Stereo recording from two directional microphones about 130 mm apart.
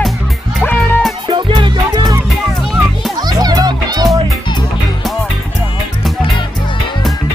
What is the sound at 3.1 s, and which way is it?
Music, 30° right (ahead or behind).